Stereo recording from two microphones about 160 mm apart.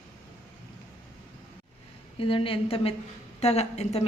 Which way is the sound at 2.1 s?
35° left (ahead or behind).